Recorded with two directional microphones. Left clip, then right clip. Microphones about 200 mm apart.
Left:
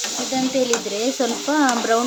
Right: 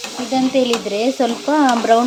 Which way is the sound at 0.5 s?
15° right (ahead or behind).